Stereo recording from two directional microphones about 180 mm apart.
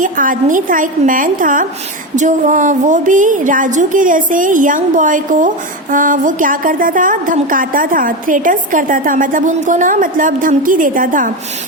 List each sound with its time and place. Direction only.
0.0 s a woman's voice: 45° right (ahead or behind)